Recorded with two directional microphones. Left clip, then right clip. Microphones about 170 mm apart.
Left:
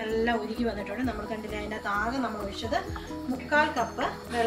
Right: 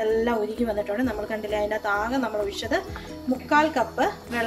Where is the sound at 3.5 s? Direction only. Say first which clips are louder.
Right 4 dB; 65° right (ahead or behind).